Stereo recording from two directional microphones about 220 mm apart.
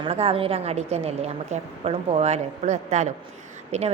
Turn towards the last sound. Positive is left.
turn(degrees=-30)  # may be behind; listen again after turning